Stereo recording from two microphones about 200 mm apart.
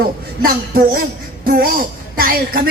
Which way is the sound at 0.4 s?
45° right (ahead or behind).